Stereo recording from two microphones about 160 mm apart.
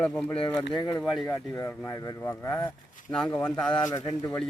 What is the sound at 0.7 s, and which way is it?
Speech, 25° left (ahead or behind).